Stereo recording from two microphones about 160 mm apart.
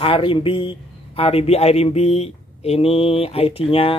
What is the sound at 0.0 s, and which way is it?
Speech, 35° left (ahead or behind).